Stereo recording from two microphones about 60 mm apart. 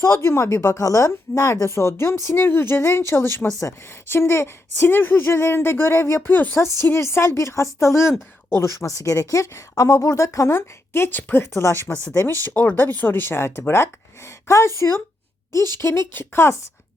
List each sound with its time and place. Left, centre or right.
0.0 s speech: left
2.3 s speech: left
6.8 s speech: left
12.2 s speech: left